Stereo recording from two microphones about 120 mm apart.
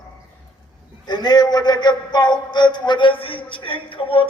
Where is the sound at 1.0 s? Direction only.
35° left (ahead or behind).